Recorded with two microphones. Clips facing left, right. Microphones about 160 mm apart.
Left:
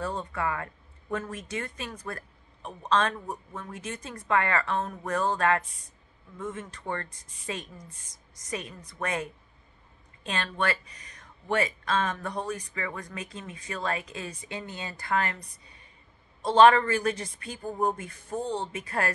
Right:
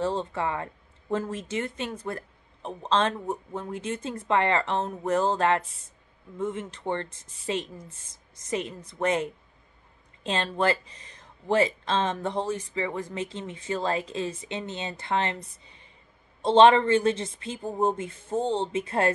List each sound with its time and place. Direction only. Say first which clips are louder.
0.0 s speech: right 4 dB; 25° right (ahead or behind)
15.6 s a sound: right 1 dB; 25° right (ahead or behind)
16.4 s speech: right 2 dB; 25° right (ahead or behind)